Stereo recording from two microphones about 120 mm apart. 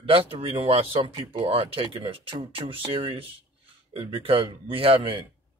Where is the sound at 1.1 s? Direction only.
35° right (ahead or behind).